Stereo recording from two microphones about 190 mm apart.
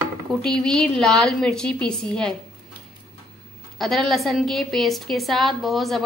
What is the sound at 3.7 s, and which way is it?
A woman's voice, centre (ahead or behind).